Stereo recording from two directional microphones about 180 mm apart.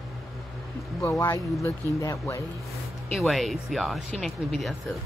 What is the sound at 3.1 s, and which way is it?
Speech, centre (ahead or behind).